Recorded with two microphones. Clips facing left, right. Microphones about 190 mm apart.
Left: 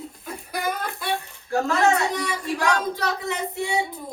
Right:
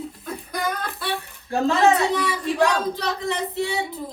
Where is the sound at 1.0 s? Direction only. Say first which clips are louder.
Left 1 dB; 15° left (ahead or behind).